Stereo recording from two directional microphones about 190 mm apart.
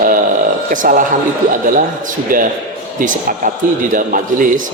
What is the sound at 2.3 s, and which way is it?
A man's voice, 45° right (ahead or behind).